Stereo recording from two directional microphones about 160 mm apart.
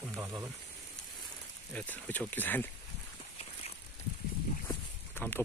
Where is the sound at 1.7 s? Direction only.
10° left (ahead or behind).